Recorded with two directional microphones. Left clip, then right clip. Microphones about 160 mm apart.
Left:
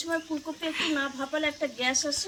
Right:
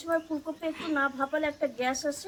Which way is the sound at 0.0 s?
5° left (ahead or behind).